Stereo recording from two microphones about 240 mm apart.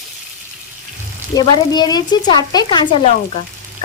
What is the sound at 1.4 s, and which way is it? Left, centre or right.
Speech, centre.